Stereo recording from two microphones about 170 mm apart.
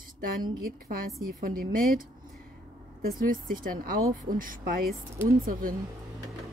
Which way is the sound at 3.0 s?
60° right (ahead or behind).